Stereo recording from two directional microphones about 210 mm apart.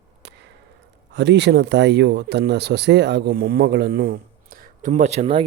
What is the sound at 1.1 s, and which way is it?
Speech, 55° right (ahead or behind).